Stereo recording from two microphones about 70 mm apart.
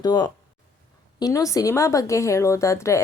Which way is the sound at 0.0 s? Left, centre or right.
Left.